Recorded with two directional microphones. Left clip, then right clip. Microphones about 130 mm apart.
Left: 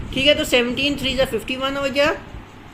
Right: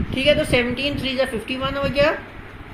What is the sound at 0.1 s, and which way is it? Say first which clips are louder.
A woman's voice: left 1 dB; 80° left.